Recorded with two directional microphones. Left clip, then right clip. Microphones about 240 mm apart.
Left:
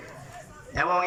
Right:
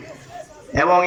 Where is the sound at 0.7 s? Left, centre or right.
Right.